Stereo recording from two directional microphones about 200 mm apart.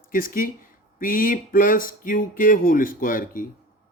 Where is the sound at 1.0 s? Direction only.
45° left (ahead or behind).